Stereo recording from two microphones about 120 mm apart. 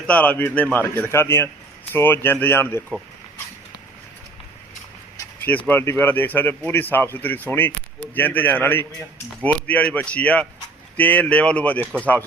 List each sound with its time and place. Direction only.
0.1 s speech: 15° left (ahead or behind)
5.5 s speech: 15° left (ahead or behind)